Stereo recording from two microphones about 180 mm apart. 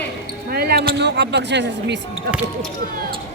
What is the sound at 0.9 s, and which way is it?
Speech, 75° right (ahead or behind).